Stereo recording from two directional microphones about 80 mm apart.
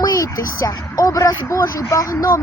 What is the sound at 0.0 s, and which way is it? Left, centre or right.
Speech, left.